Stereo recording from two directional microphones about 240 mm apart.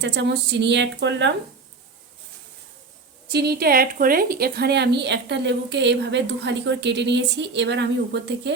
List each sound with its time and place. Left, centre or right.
0.0 s a woman's voice: right
3.3 s a woman's voice: right